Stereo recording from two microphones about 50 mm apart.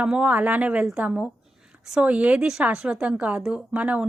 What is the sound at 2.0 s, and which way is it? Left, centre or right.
Speech, right.